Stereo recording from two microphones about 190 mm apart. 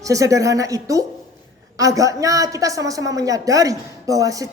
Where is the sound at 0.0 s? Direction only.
15° right (ahead or behind).